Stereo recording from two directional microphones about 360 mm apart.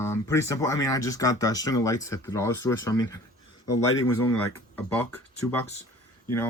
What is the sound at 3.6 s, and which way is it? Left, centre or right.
Speech, left.